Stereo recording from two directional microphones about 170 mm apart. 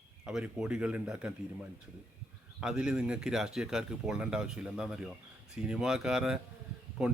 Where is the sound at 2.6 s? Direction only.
5° right (ahead or behind).